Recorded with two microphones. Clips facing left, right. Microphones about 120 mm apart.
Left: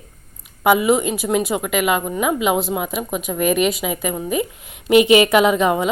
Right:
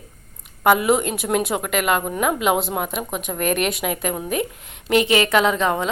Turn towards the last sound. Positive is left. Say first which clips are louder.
# left 4 dB
turn(degrees=10)  # may be behind; listen again after turning